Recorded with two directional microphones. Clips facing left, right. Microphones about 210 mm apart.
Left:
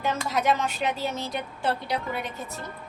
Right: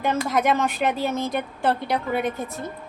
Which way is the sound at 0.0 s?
55° right (ahead or behind).